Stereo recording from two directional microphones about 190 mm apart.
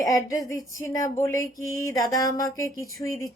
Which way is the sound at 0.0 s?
15° left (ahead or behind).